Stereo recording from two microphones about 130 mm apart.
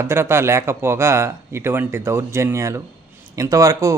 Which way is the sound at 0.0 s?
20° right (ahead or behind).